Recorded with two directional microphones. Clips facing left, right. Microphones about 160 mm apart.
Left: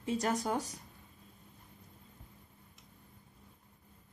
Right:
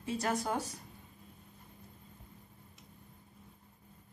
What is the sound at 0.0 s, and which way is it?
Speech, 15° left (ahead or behind).